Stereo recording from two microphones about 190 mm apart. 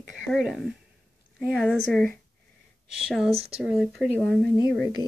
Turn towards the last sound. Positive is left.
turn(degrees=20)  # may be behind; listen again after turning